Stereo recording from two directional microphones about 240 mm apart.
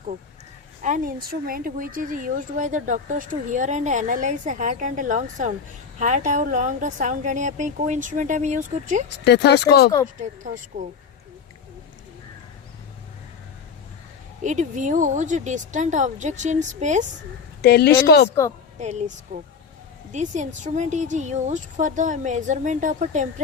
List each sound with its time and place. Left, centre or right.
0.8 s a woman's voice: right
9.2 s speech: left
10.2 s a woman's voice: right
14.4 s a woman's voice: right
17.6 s speech: left
18.8 s speech: right
20.1 s a woman's voice: right